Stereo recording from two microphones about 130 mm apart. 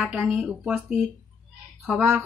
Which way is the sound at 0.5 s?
5° right (ahead or behind).